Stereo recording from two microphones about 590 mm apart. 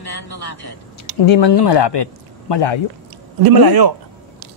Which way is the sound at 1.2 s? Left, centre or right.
Left.